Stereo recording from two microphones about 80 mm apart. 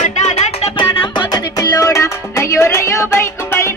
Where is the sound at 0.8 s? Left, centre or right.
Left.